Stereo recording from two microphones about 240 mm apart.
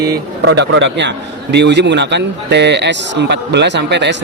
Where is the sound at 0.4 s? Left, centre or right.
Right.